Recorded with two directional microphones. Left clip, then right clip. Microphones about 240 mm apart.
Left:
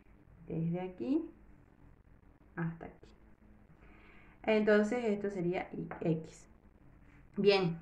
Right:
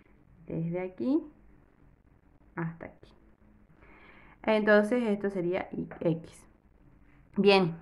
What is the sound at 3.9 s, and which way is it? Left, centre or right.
A woman's voice, right.